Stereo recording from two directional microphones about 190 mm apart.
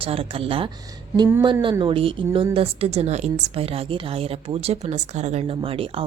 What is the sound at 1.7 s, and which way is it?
A woman's voice, 25° right (ahead or behind).